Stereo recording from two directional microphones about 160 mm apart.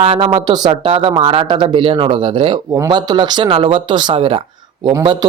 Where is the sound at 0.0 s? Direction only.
40° right (ahead or behind).